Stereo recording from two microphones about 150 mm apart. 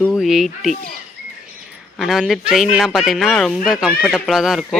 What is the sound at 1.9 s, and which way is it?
Speech, centre (ahead or behind).